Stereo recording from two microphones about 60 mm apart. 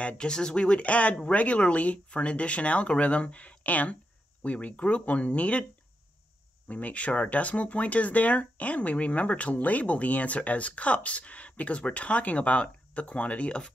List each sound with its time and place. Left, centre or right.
0.0 s speech: centre
6.7 s speech: left